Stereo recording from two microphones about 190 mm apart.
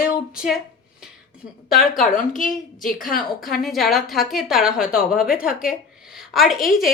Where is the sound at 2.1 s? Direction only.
45° left (ahead or behind).